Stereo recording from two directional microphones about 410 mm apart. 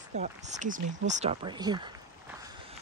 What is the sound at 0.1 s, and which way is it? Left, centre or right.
Speech, centre.